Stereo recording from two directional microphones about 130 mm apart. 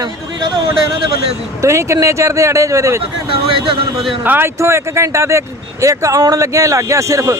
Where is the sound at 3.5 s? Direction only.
45° right (ahead or behind).